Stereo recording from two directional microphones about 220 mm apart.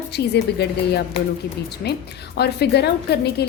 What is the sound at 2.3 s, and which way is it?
Speech, 45° left (ahead or behind).